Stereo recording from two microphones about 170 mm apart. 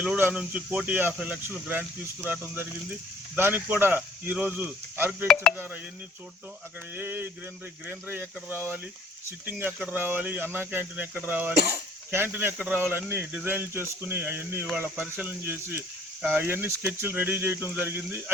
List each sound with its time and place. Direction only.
0.0 s speech: 10° right (ahead or behind)
5.3 s speech: centre (ahead or behind)
5.5 s speech: 10° right (ahead or behind)
6.9 s speech: 10° right (ahead or behind)
11.5 s speech: 75° right (ahead or behind)
12.1 s speech: 10° right (ahead or behind)